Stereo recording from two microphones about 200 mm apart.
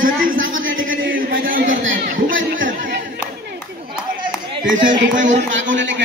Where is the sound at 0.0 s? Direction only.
45° right (ahead or behind).